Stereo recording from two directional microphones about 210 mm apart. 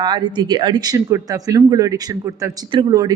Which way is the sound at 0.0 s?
20° right (ahead or behind).